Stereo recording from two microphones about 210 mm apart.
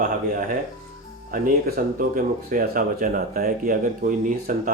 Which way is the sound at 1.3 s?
45° right (ahead or behind).